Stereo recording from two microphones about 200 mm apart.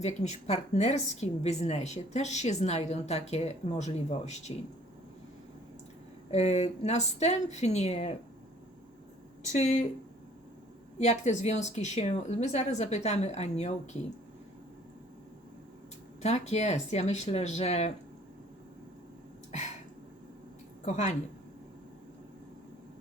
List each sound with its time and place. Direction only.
0.0 s a woman's voice: 35° left (ahead or behind)
6.3 s a woman's voice: 35° left (ahead or behind)
9.5 s a woman's voice: 35° left (ahead or behind)
10.9 s a woman's voice: 35° left (ahead or behind)
16.2 s a woman's voice: 35° left (ahead or behind)
19.5 s a sound: 35° left (ahead or behind)
20.8 s a woman's voice: 35° left (ahead or behind)